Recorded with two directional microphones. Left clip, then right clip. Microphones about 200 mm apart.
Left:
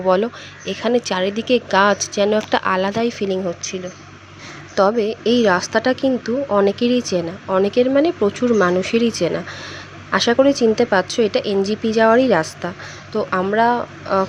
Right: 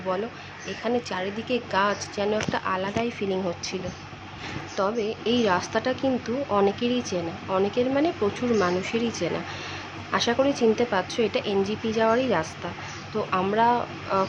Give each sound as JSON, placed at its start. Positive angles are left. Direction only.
{"t": 0.1, "sound": "a woman's voice", "side_deg": 45}
{"t": 4.8, "sound": "a woman's voice", "side_deg": 40}